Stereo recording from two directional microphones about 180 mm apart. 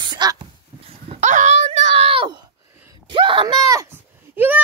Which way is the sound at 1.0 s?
35° right (ahead or behind).